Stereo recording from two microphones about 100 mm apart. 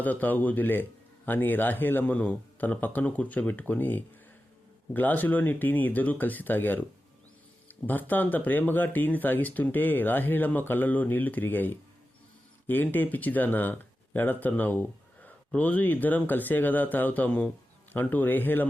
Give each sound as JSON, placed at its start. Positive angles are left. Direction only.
{"t": 0.0, "sound": "speech", "side_deg": 15}
{"t": 7.9, "sound": "speech", "side_deg": 20}